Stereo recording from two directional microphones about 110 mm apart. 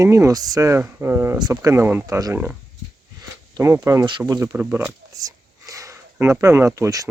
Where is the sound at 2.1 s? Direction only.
30° right (ahead or behind).